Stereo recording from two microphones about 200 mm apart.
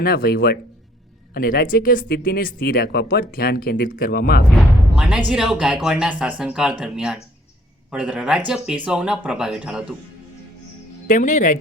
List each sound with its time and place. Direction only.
0.0 s speech: 50° left (ahead or behind)
4.9 s speech: 5° right (ahead or behind)
11.1 s speech: 40° left (ahead or behind)